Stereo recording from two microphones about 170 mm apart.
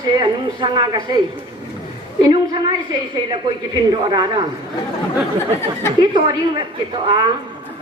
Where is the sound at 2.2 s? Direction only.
25° right (ahead or behind).